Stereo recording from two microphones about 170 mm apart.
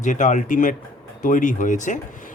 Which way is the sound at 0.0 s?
45° left (ahead or behind).